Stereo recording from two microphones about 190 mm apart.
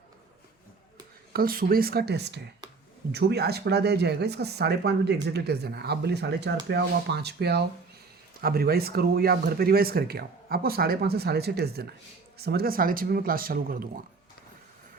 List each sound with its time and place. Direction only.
1.3 s speech: 50° right (ahead or behind)